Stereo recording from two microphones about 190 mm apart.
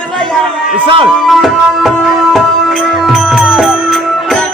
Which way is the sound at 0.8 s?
25° right (ahead or behind).